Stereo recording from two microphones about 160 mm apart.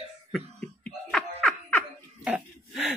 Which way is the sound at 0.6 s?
5° left (ahead or behind).